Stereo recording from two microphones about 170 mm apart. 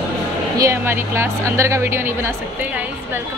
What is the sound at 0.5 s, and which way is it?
Speech, 15° right (ahead or behind).